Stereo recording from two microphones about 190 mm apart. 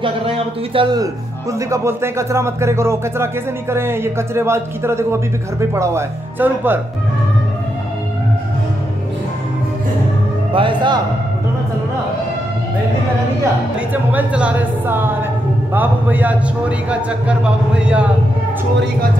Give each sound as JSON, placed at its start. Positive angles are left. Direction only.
{"t": 0.0, "sound": "speech", "side_deg": -25}
{"t": 10.5, "sound": "speech", "side_deg": -25}
{"t": 13.7, "sound": "speech", "side_deg": -5}